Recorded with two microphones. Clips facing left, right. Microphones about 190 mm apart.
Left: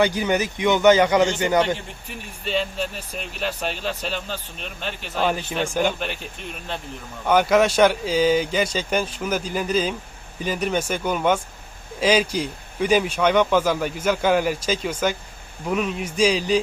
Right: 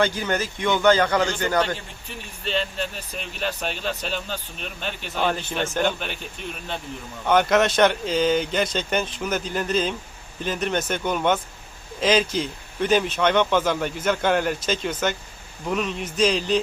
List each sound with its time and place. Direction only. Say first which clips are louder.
0.0 s a man's voice: left 3 dB; 15° left (ahead or behind)
2.4 s speech: left 2 dB; 5° left (ahead or behind)
7.3 s a man's voice: left 1 dB; 10° left (ahead or behind)